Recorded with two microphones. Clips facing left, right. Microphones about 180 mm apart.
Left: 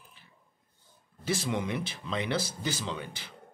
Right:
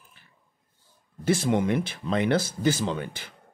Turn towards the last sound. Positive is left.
turn(degrees=-50)  # may be behind; listen again after turning